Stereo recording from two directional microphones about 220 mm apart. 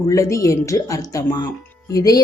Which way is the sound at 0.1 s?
15° left (ahead or behind).